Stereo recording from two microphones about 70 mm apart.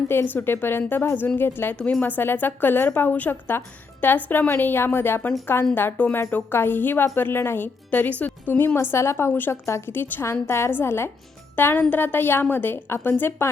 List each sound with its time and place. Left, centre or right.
0.1 s a woman's voice: left
1.7 s a woman's voice: centre; by 5.7 s left
6.0 s a woman's voice: left
6.3 s a woman's voice: left
9.3 s a woman's voice: left